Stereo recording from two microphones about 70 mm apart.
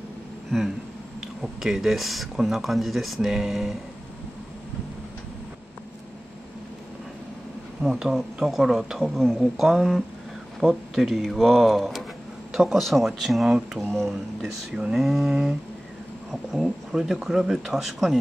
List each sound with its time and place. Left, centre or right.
1.2 s speech: centre
7.8 s speech: centre
13.7 s speech: right
14.8 s a sound: centre
16.3 s speech: centre